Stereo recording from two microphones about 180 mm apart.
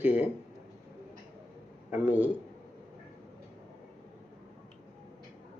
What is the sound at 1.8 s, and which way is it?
Speech, 10° right (ahead or behind).